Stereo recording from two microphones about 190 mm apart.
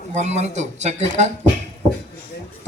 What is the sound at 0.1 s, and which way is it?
A man's voice, 40° right (ahead or behind).